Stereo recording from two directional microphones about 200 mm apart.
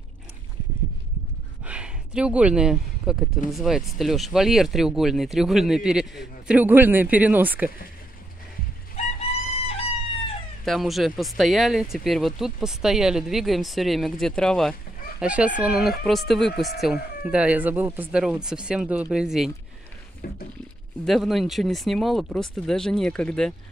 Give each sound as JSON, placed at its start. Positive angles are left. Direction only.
{"t": 1.6, "sound": "a sound", "side_deg": -5}
{"t": 3.5, "sound": "speech", "side_deg": 0}
{"t": 8.9, "sound": "music", "side_deg": 30}
{"t": 10.6, "sound": "speech", "side_deg": 0}
{"t": 20.2, "sound": "a sound", "side_deg": 45}
{"t": 21.0, "sound": "speech", "side_deg": 0}